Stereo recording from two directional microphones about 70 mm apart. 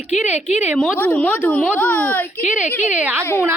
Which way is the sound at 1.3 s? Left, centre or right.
Centre.